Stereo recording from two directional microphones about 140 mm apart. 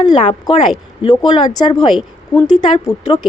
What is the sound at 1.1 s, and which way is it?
Speech, 25° left (ahead or behind).